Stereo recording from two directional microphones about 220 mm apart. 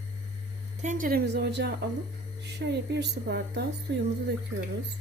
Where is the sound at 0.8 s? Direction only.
35° right (ahead or behind); by 3.7 s 50° right (ahead or behind).